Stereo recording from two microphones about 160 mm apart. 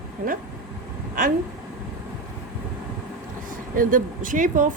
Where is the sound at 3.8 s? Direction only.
60° right (ahead or behind).